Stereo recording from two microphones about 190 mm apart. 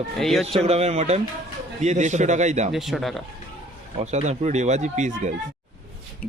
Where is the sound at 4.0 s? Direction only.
35° right (ahead or behind).